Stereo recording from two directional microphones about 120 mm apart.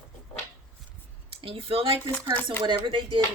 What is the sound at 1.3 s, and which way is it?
Speech, 50° right (ahead or behind).